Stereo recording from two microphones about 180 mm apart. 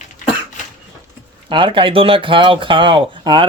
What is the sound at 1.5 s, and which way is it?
A woman's voice, 25° right (ahead or behind).